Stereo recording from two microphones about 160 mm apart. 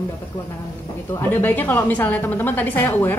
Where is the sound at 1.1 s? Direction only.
10° left (ahead or behind).